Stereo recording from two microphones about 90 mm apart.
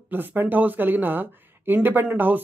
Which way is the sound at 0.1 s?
20° right (ahead or behind).